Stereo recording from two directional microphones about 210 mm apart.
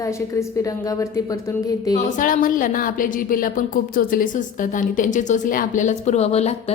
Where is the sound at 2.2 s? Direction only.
40° left (ahead or behind).